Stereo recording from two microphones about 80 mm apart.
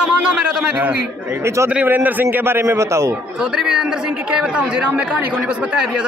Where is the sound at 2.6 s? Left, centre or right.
Right.